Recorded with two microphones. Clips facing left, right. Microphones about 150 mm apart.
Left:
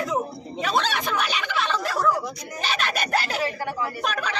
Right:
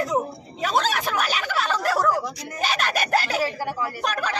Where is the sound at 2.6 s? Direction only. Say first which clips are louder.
Right 2 dB; 45° right (ahead or behind).